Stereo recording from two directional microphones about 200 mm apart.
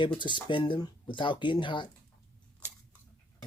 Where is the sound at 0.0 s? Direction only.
25° left (ahead or behind).